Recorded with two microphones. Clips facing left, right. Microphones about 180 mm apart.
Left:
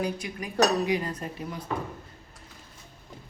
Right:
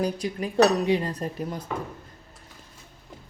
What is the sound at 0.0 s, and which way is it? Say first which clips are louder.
Speech: right 4 dB; 30° right (ahead or behind).